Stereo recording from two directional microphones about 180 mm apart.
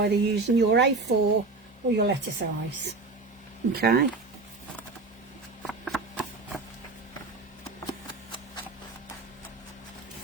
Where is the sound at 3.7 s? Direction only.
60° right (ahead or behind).